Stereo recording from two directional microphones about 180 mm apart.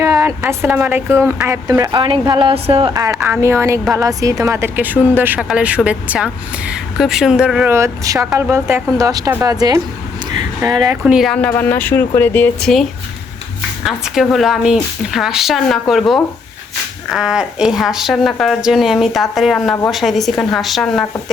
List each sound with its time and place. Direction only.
0.0 s a sound: 15° right (ahead or behind)
0.4 s a woman's voice: 15° right (ahead or behind); by 2.9 s 30° right (ahead or behind)
3.1 s a woman's voice: 5° right (ahead or behind)
3.4 s a woman's voice: 15° right (ahead or behind)
11.0 s speech: centre (ahead or behind)
13.8 s a woman's voice: centre (ahead or behind)